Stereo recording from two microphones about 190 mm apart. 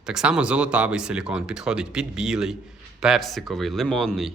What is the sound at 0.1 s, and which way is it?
Speech, 5° right (ahead or behind).